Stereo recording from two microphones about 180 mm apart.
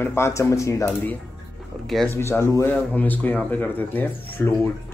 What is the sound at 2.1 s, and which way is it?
Speech, 15° left (ahead or behind).